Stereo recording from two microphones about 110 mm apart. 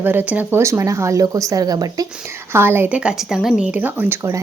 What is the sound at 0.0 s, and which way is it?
A woman's voice, 20° right (ahead or behind).